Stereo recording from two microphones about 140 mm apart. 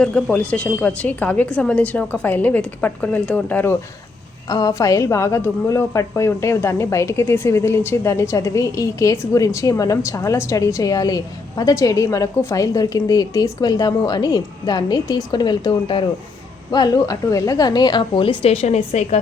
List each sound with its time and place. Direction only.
0.0 s a woman's voice: 5° left (ahead or behind)
4.4 s a woman's voice: 25° left (ahead or behind); by 19.2 s 50° left (ahead or behind)